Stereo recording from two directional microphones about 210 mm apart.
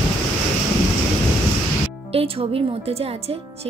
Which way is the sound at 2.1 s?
25° right (ahead or behind).